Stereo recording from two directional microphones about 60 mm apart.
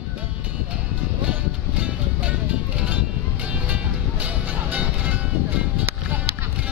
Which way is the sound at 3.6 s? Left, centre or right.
Right.